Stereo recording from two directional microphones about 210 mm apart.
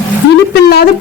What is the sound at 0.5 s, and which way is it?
Speech, 50° left (ahead or behind).